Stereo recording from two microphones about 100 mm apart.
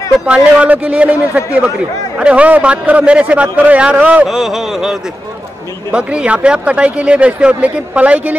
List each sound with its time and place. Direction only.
0.3 s speech: 15° right (ahead or behind)
4.4 s a sound: 5° right (ahead or behind)
5.9 s speech: 10° right (ahead or behind)